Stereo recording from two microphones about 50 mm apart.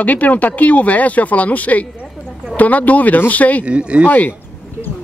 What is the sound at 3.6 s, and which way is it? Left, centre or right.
Speech, right.